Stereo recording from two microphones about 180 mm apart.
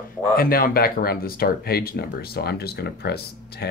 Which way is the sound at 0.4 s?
55° left (ahead or behind).